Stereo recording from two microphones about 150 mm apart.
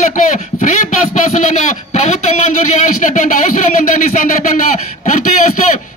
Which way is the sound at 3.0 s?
60° left (ahead or behind).